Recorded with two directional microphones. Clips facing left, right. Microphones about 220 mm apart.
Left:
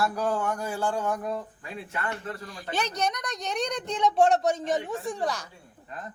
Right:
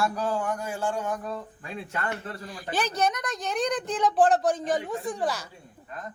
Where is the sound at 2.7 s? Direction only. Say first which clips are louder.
Right 2 dB; 5° right (ahead or behind).